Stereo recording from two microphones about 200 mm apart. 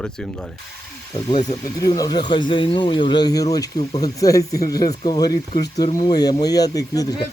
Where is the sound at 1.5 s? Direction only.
20° left (ahead or behind).